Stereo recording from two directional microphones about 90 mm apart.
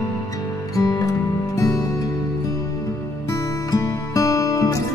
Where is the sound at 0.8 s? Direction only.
40° left (ahead or behind).